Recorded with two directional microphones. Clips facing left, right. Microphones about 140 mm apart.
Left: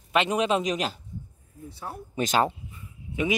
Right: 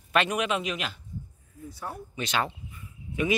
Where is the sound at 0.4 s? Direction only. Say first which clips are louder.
Left 4 dB; 35° left (ahead or behind).